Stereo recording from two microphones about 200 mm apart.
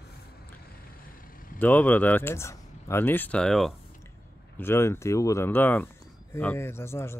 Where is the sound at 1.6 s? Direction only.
10° left (ahead or behind).